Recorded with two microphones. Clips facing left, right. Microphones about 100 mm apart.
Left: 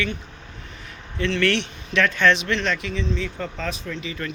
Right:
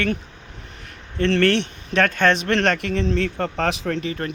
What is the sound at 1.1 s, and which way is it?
Speech, 50° right (ahead or behind).